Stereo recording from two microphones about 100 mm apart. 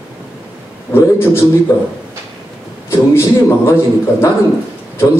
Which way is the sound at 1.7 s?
25° left (ahead or behind).